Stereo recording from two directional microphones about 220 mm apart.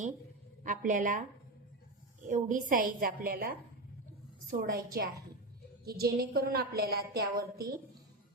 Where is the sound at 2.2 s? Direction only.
35° right (ahead or behind).